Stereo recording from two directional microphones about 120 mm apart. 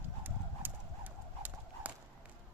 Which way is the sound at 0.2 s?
15° right (ahead or behind).